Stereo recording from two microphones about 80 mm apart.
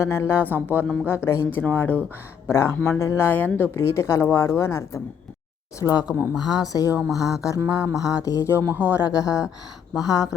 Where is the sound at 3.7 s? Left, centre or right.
Left.